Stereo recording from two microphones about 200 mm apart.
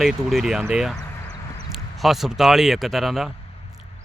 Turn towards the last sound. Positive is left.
turn(degrees=0)  # may be behind; listen again after turning